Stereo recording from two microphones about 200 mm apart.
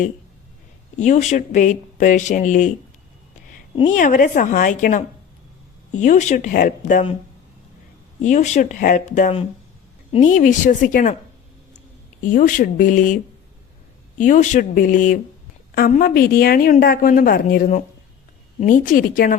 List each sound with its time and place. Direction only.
0.9 s speech: 35° left (ahead or behind)
3.8 s speech: 40° left (ahead or behind)
8.2 s speech: 35° left (ahead or behind)
12.2 s speech: 40° left (ahead or behind)
14.2 s a woman's voice: 40° left (ahead or behind)